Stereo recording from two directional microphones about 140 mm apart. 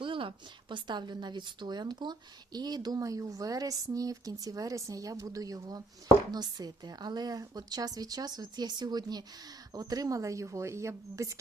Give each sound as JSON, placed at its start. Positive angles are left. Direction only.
{"t": 0.0, "sound": "speech", "side_deg": -35}